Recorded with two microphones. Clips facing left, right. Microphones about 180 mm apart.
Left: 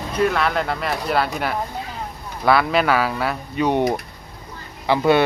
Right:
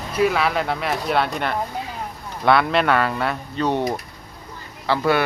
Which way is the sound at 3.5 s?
15° left (ahead or behind).